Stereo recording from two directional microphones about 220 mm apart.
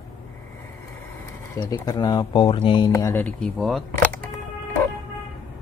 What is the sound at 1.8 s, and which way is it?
Speech, 15° left (ahead or behind).